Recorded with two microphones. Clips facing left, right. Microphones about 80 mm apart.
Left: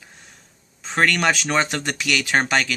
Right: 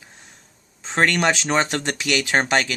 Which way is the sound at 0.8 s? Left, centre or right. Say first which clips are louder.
Even; right.